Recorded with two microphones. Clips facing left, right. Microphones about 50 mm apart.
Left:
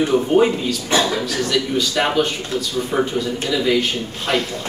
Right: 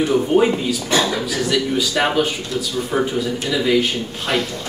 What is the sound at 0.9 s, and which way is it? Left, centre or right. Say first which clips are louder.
Speech: even; left.